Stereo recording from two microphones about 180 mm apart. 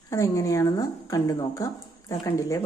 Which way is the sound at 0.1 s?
15° left (ahead or behind).